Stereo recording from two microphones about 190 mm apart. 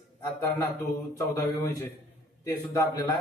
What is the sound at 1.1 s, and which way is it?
A man's voice, 15° left (ahead or behind).